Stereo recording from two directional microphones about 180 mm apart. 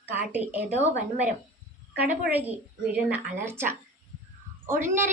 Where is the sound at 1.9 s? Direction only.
10° right (ahead or behind).